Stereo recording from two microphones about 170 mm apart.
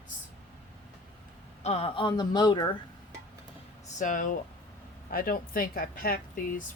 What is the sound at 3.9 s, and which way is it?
Speech, 50° left (ahead or behind).